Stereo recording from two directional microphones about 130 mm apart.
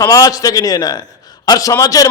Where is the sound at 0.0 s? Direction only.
25° left (ahead or behind).